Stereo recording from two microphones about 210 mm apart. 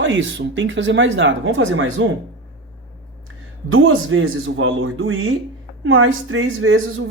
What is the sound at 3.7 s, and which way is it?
Speech, 70° right (ahead or behind).